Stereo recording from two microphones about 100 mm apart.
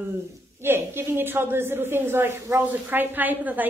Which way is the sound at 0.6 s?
25° right (ahead or behind).